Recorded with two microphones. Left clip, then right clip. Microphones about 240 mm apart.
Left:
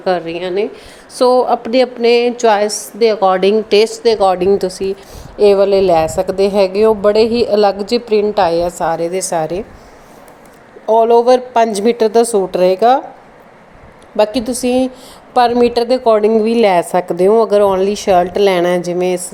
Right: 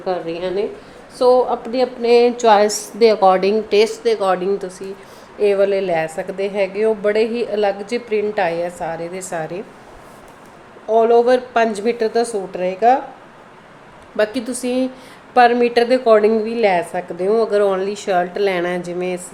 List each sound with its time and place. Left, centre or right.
0.0 s a woman's voice: centre
1.1 s a woman's voice: left
2.6 s a woman's voice: centre; by 9.6 s left
10.8 s a woman's voice: left
14.2 s a woman's voice: centre